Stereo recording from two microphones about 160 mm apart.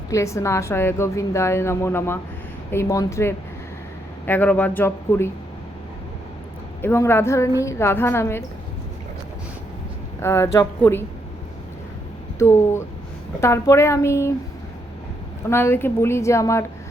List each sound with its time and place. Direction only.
0.1 s a woman's voice: 20° left (ahead or behind)
6.8 s a woman's voice: 15° left (ahead or behind)
10.2 s a woman's voice: 15° left (ahead or behind)
12.4 s a woman's voice: 15° left (ahead or behind)
15.4 s a woman's voice: 15° left (ahead or behind)